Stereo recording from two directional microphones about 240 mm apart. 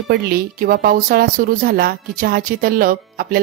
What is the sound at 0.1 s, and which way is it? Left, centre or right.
A woman's voice, right.